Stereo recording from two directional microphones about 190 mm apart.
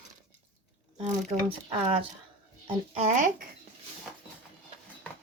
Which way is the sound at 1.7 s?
25° right (ahead or behind).